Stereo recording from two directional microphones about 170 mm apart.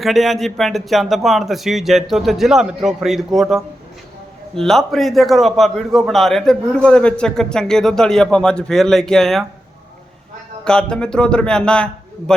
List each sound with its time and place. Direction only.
0.0 s a man's voice: centre (ahead or behind)
10.6 s a man's voice: 5° left (ahead or behind)